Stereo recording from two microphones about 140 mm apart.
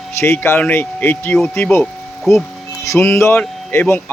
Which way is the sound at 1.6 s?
5° left (ahead or behind).